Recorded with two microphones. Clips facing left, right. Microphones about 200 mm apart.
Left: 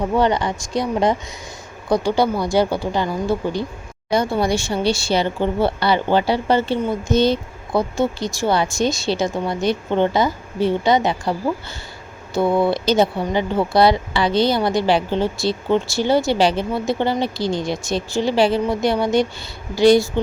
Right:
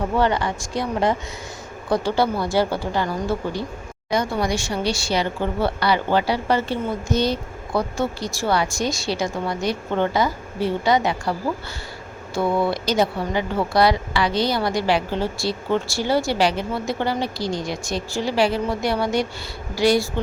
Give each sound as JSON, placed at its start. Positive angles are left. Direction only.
{"t": 0.2, "sound": "a woman's voice", "side_deg": 20}
{"t": 4.1, "sound": "speech", "side_deg": 30}